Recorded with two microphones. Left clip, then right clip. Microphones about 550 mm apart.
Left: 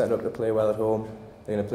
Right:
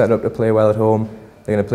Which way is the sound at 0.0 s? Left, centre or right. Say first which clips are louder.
Right 9 dB; right.